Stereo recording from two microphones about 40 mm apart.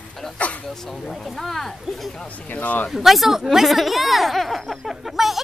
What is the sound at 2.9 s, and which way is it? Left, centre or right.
Speech, centre.